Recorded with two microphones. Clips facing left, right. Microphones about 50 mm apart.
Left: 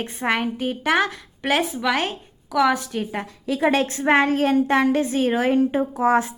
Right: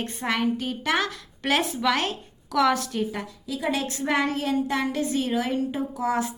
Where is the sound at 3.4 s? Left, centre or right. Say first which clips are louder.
Left 8 dB; left.